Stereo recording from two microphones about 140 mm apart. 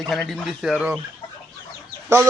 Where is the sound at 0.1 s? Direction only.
Centre (ahead or behind).